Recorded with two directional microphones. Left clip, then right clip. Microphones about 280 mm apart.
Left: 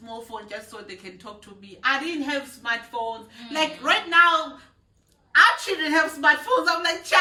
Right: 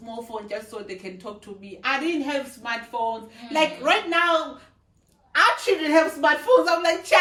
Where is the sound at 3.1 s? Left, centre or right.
Centre.